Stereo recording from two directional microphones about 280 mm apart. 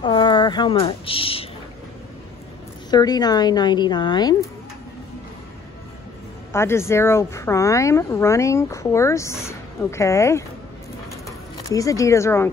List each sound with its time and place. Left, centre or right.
0.0 s speech: centre
2.9 s speech: centre
6.5 s speech: centre
11.5 s speech: centre